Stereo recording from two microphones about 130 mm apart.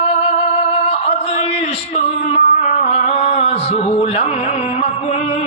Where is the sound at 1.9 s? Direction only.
55° left (ahead or behind).